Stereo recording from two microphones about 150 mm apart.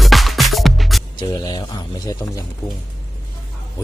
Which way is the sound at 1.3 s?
30° left (ahead or behind).